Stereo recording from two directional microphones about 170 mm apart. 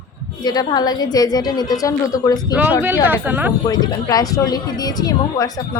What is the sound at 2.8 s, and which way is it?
Speech, 10° right (ahead or behind).